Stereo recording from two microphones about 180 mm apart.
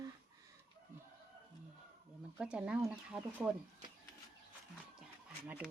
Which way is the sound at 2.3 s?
5° right (ahead or behind).